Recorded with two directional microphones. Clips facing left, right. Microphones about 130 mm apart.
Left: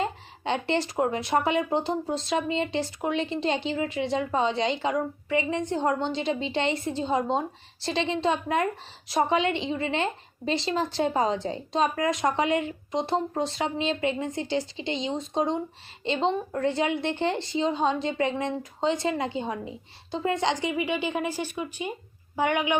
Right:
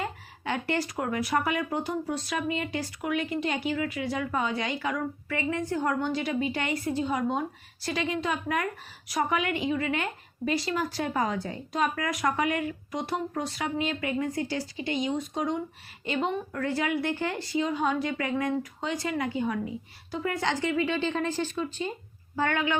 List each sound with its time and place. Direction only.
0.0 s a woman's voice: 25° left (ahead or behind)